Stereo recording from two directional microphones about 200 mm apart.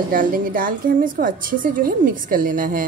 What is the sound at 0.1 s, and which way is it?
A woman's voice, 45° right (ahead or behind).